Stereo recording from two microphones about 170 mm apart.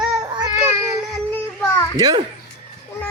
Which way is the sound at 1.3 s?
15° left (ahead or behind).